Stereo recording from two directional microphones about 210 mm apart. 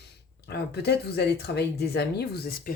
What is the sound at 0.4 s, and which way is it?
Speech, 50° left (ahead or behind).